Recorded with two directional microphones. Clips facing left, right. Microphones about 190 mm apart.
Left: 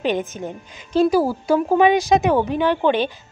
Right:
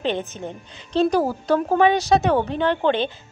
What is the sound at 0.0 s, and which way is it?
A woman's voice, 10° left (ahead or behind).